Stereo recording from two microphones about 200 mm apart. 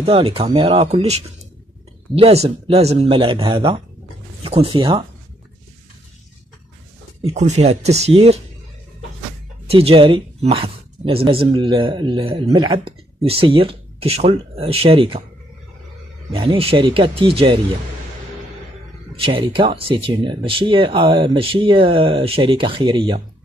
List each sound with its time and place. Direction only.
0.0 s speech: 30° right (ahead or behind)
7.2 s speech: 30° right (ahead or behind)
9.7 s speech: 30° right (ahead or behind)
16.3 s speech: 25° right (ahead or behind)
19.1 s speech: 25° right (ahead or behind)